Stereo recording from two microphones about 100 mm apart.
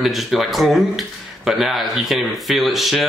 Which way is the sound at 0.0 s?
Centre (ahead or behind).